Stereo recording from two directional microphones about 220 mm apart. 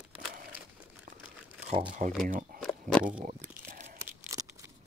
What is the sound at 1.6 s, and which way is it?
Speech, 25° right (ahead or behind).